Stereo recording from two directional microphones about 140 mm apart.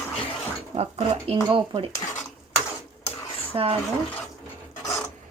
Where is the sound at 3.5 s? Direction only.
40° right (ahead or behind).